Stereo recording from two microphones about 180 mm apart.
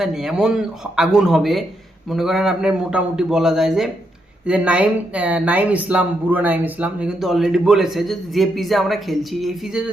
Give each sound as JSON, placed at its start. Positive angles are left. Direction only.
{"t": 0.0, "sound": "a woman's voice", "side_deg": 0}